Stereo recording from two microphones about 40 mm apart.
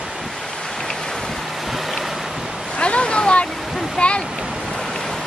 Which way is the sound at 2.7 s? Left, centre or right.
Left.